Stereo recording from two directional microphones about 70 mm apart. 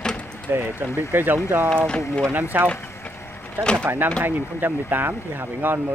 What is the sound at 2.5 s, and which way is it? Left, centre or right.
Speech, right.